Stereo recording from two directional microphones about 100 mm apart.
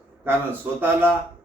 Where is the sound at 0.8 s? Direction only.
20° right (ahead or behind).